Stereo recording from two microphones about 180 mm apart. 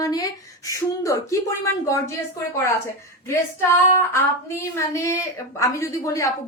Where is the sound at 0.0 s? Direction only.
20° left (ahead or behind).